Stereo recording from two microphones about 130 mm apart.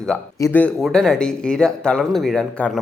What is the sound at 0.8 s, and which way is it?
Speech, centre (ahead or behind).